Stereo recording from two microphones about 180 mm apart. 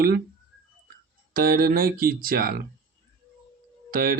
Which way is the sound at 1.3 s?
55° right (ahead or behind).